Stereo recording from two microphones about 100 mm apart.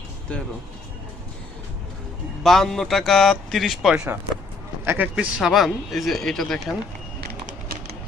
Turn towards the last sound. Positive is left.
turn(degrees=5)  # may be behind; listen again after turning